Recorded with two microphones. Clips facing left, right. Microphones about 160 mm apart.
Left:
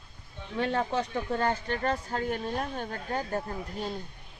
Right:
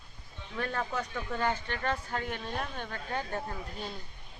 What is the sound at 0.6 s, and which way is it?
Speech, 25° left (ahead or behind).